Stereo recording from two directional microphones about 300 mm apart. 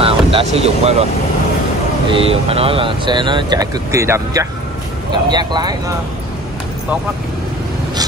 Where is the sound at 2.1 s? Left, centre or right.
Centre.